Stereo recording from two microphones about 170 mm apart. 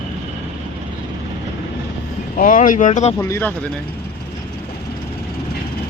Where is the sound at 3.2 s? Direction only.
15° left (ahead or behind).